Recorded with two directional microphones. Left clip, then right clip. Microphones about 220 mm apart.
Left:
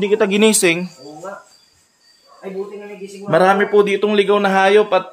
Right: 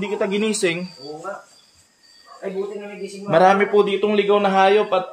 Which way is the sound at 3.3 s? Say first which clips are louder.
Left 2 dB; 20° left (ahead or behind).